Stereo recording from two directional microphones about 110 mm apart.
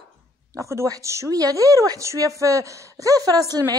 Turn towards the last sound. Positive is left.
turn(degrees=-35)  # may be behind; listen again after turning